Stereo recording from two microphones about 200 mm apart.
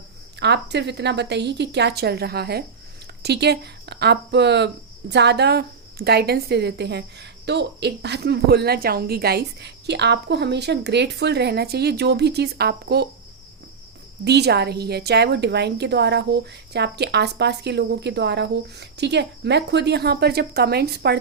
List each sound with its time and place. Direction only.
0.3 s speech: 60° right (ahead or behind)
14.3 s speech: 55° right (ahead or behind)